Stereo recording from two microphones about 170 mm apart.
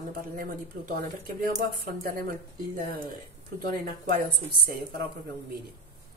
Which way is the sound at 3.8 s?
60° right (ahead or behind).